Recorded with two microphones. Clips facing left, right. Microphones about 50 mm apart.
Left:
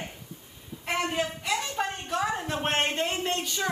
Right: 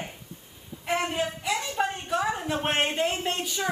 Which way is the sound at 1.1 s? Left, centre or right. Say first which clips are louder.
Right 1 dB; centre.